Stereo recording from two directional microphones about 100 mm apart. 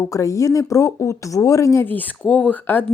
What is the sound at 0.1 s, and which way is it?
Speech, 35° left (ahead or behind).